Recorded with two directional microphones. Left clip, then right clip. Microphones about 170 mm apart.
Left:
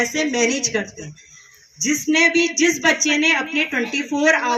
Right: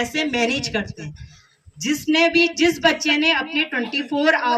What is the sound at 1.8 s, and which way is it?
A woman's voice, 35° right (ahead or behind).